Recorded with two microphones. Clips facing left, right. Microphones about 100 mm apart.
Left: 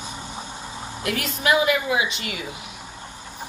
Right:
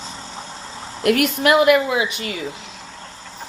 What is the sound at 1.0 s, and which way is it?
Speech, 60° right (ahead or behind).